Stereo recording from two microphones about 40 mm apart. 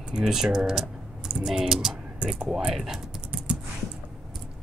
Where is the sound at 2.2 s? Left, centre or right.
Right.